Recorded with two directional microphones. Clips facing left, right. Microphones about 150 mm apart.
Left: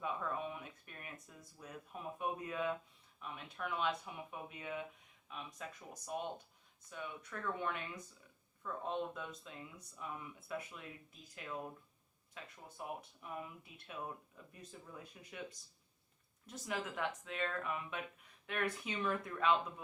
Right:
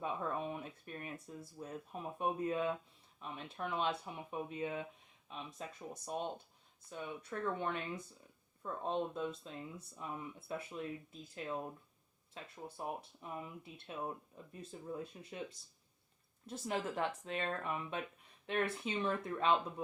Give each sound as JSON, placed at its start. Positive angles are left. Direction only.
{"t": 0.0, "sound": "speech", "side_deg": -35}